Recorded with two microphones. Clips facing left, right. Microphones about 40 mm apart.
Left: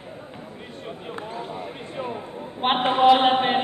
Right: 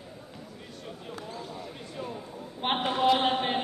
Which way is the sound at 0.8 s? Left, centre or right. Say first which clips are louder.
Left 7 dB; left.